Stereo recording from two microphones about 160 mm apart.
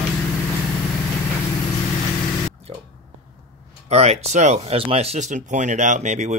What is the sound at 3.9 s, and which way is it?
Speech, 40° right (ahead or behind).